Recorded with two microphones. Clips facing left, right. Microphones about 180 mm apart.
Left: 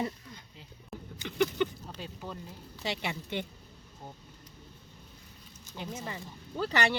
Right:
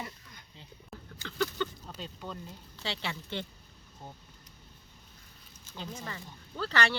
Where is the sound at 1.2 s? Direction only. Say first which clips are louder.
Left 4 dB; 15° left (ahead or behind).